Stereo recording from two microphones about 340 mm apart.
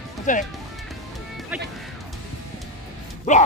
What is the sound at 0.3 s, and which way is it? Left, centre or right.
Speech, left.